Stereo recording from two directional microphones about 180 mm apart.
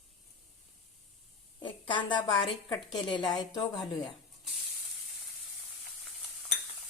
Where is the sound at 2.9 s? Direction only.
25° left (ahead or behind).